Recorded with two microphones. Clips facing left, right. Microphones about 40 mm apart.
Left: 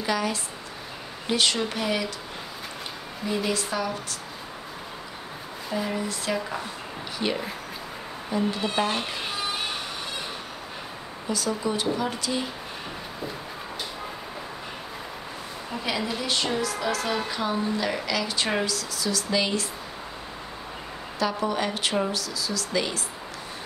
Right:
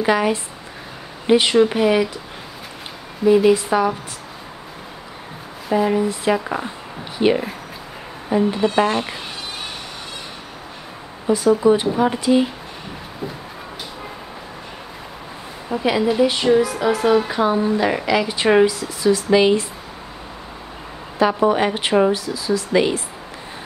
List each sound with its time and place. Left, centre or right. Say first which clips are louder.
0.0 s a woman's voice: right 9 dB; right
3.3 s a woman's voice: right 14 dB; centre
5.7 s a woman's voice: right 11 dB; centre
11.2 s a woman's voice: right 13 dB; right
15.7 s a woman's voice: right 11 dB; right
21.2 s a woman's voice: right 10 dB; right